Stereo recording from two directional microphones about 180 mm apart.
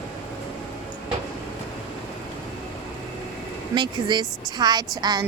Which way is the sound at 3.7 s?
25° right (ahead or behind).